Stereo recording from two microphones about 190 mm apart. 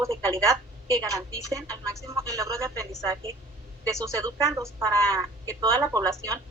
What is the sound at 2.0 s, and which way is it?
Speech, 15° right (ahead or behind).